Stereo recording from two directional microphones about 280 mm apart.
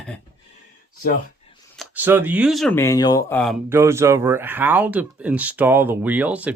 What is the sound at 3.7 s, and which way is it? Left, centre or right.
Speech, centre.